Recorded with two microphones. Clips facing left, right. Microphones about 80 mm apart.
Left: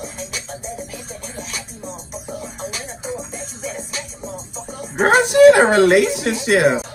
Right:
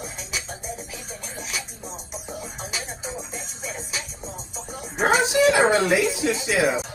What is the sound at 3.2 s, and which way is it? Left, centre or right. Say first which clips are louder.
Music: left 5 dB; centre.